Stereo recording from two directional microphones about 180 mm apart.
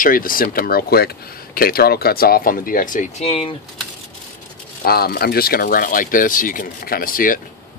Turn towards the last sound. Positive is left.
turn(degrees=50)  # may be behind; listen again after turning